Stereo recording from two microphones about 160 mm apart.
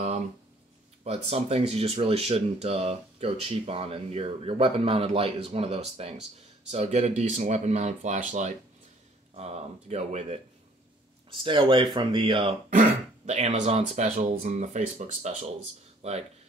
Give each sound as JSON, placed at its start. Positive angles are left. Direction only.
{"t": 1.0, "sound": "speech", "side_deg": -40}
{"t": 11.2, "sound": "speech", "side_deg": -30}
{"t": 12.6, "sound": "speech", "side_deg": -55}
{"t": 14.3, "sound": "speech", "side_deg": -60}